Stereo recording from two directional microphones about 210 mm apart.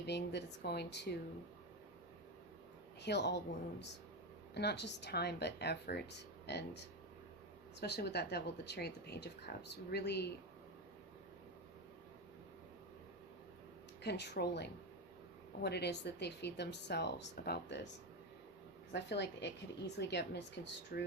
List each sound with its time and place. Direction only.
0.0 s speech: 55° left (ahead or behind)
3.0 s speech: 55° left (ahead or behind)
14.0 s speech: 55° left (ahead or behind)
18.9 s speech: 55° left (ahead or behind)